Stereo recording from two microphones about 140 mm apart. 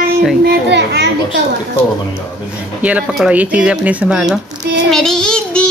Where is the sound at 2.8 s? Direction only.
5° right (ahead or behind).